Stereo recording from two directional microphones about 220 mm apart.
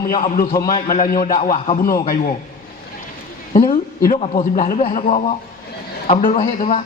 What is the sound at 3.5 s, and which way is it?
A woman's voice, 40° left (ahead or behind).